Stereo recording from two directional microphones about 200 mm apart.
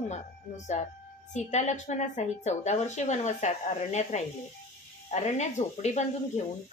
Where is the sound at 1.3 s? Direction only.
35° left (ahead or behind).